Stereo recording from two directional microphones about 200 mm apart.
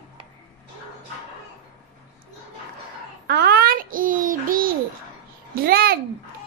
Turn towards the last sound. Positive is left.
turn(degrees=-50)  # may be behind; listen again after turning